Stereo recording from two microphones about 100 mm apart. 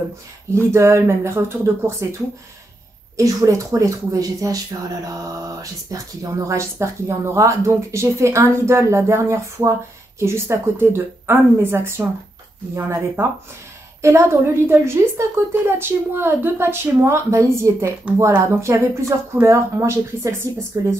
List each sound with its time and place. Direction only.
0.6 s a woman's voice: 25° right (ahead or behind)
3.2 s a woman's voice: 35° right (ahead or behind)
18.1 s speech: 15° right (ahead or behind)
18.5 s a woman's voice: 30° right (ahead or behind)